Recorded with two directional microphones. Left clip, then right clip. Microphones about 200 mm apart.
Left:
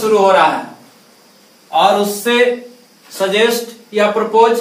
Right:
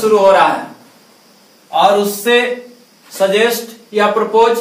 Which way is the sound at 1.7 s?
15° left (ahead or behind).